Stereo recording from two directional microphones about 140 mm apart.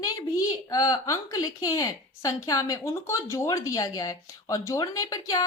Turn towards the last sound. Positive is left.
turn(degrees=25)  # may be behind; listen again after turning